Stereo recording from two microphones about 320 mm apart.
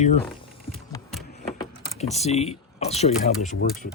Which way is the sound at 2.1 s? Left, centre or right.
Centre.